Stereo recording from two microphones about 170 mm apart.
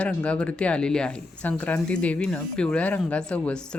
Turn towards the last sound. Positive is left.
turn(degrees=5)  # may be behind; listen again after turning